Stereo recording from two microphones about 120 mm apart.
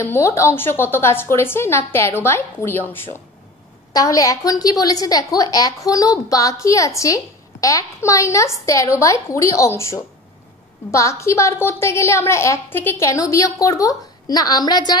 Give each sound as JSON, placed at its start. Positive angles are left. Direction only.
{"t": 0.0, "sound": "a woman's voice", "side_deg": 25}
{"t": 3.9, "sound": "a woman's voice", "side_deg": 30}